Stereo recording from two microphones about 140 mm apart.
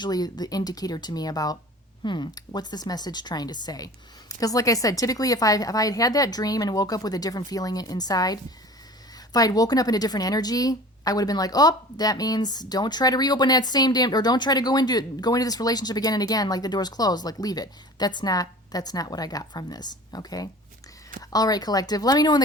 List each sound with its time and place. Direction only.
0.0 s a woman's voice: 30° left (ahead or behind)